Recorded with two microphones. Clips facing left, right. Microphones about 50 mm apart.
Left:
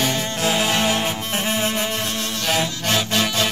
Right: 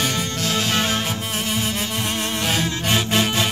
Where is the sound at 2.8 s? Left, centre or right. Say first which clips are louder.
Right 2 dB; right.